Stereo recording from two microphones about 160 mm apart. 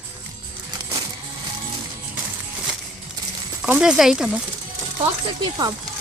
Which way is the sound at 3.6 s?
5° right (ahead or behind).